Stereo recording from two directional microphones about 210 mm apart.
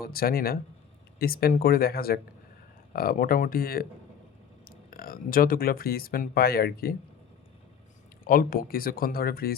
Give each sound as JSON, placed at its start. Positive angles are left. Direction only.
{"t": 0.0, "sound": "speech", "side_deg": 45}
{"t": 8.2, "sound": "speech", "side_deg": 40}